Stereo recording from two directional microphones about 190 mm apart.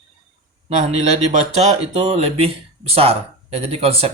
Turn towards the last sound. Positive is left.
turn(degrees=-30)  # may be behind; listen again after turning